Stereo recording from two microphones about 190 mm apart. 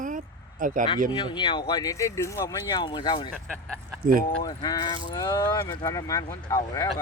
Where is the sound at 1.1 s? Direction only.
25° left (ahead or behind).